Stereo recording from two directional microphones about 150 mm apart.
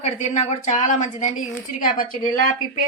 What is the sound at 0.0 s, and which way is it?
A woman's voice, 50° left (ahead or behind).